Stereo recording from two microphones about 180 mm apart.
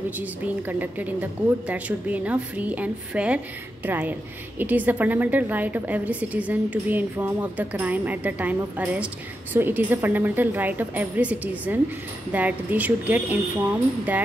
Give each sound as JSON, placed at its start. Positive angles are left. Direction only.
{"t": 0.2, "sound": "a woman's voice", "side_deg": -10}